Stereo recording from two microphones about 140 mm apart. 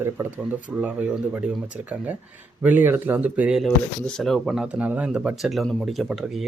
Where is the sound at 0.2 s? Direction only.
20° right (ahead or behind).